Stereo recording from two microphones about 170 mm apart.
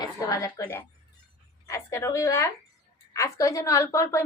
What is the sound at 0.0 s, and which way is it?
A woman's voice, 20° left (ahead or behind).